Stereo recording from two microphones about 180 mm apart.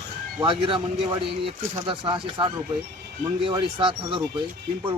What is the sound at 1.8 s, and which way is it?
Speech, 30° right (ahead or behind).